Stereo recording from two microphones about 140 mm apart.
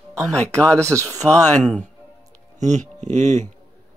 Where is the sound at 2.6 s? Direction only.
55° right (ahead or behind).